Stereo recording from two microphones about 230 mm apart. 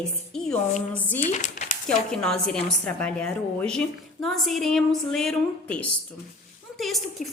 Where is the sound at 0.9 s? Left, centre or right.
Centre.